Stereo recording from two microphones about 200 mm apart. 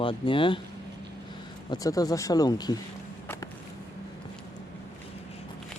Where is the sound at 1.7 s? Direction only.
20° left (ahead or behind).